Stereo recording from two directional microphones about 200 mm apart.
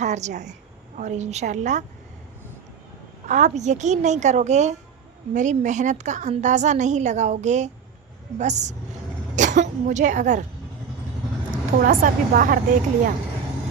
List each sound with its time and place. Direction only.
0.0 s a woman's voice: 35° right (ahead or behind)
3.2 s a woman's voice: 35° right (ahead or behind)
11.5 s a woman's voice: 45° right (ahead or behind)